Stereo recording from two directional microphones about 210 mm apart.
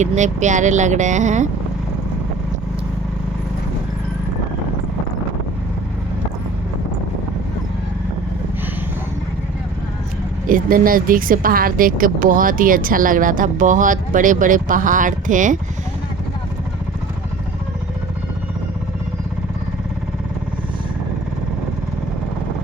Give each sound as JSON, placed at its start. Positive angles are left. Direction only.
{"t": 0.0, "sound": "speech", "side_deg": -35}
{"t": 10.5, "sound": "speech", "side_deg": -40}